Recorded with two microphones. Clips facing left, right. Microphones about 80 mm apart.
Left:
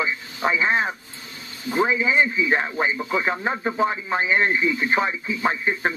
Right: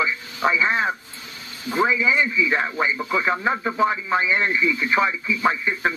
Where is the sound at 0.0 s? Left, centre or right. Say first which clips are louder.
Right 2 dB; right.